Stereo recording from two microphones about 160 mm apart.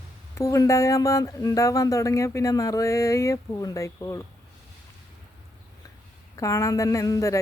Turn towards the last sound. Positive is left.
turn(degrees=20)  # may be behind; listen again after turning